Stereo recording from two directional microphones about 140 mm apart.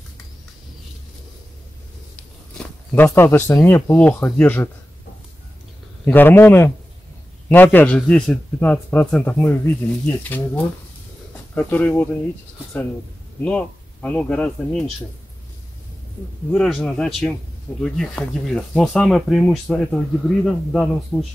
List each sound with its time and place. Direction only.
2.5 s a man's voice: 15° left (ahead or behind)
6.0 s a man's voice: 15° left (ahead or behind)
13.4 s a man's voice: 10° left (ahead or behind)
16.5 s speech: 5° left (ahead or behind)